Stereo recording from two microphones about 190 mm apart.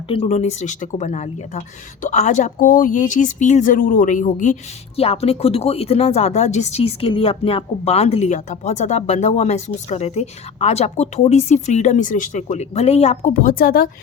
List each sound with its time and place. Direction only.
0.1 s speech: 35° left (ahead or behind)